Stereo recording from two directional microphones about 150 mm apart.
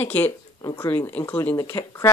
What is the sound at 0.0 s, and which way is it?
Speech, 15° left (ahead or behind).